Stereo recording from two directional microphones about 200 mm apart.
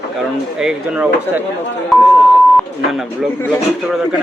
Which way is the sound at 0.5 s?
5° right (ahead or behind).